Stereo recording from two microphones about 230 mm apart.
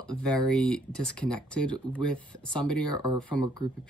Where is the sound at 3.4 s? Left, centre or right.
Centre.